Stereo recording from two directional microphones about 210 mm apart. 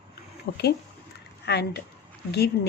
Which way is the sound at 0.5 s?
45° left (ahead or behind).